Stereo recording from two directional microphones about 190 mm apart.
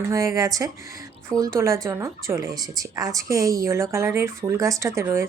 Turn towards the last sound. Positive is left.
turn(degrees=-15)  # may be behind; listen again after turning